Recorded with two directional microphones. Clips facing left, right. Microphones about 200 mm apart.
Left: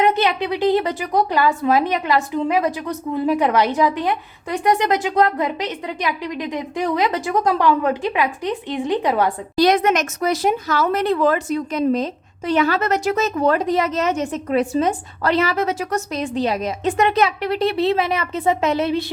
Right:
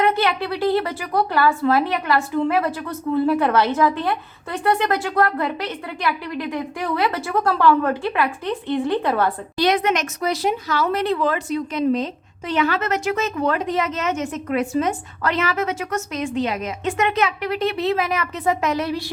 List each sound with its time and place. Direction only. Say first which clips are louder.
0.0 s a woman's voice: left 2 dB; 20° left (ahead or behind)
9.6 s a woman's voice: left 4 dB; 40° left (ahead or behind); by 19.0 s 25° left (ahead or behind)